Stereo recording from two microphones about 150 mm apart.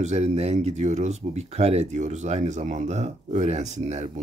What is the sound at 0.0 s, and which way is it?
Speech, 45° right (ahead or behind).